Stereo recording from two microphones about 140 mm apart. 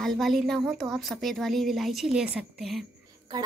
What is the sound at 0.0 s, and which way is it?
Speech, centre (ahead or behind).